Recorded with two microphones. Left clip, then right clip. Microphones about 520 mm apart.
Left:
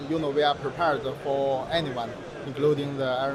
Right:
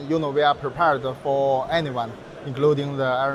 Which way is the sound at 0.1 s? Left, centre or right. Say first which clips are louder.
Right 4 dB; right.